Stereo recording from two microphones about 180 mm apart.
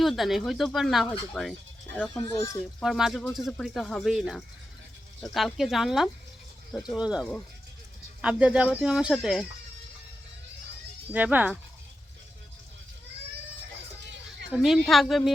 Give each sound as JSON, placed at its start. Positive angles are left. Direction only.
{"t": 0.0, "sound": "speech", "side_deg": 0}
{"t": 2.1, "sound": "speech", "side_deg": 20}
{"t": 2.8, "sound": "speech", "side_deg": 0}
{"t": 11.1, "sound": "speech", "side_deg": -10}
{"t": 14.0, "sound": "children playing", "side_deg": -70}
{"t": 14.5, "sound": "speech", "side_deg": 0}